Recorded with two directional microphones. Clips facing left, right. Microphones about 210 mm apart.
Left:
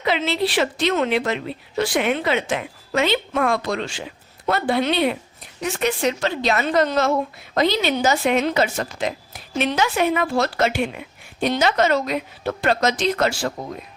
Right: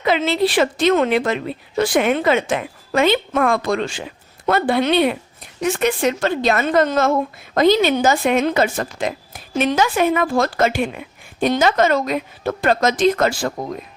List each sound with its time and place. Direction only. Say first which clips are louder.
0.0 s a woman's voice: right 4 dB; 50° right (ahead or behind)